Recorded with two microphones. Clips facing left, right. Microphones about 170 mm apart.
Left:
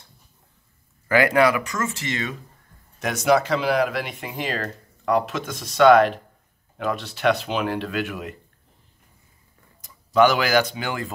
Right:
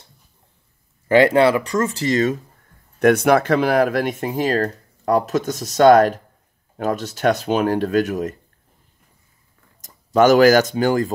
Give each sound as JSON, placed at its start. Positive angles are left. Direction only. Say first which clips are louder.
{"t": 1.0, "sound": "speech", "louder": "right 5 dB", "side_deg": -25}
{"t": 3.0, "sound": "speech", "louder": "right 6 dB", "side_deg": -55}
{"t": 9.8, "sound": "speech", "louder": "right 2 dB", "side_deg": -45}